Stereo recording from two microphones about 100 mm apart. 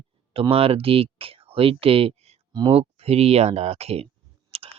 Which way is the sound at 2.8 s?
90° right.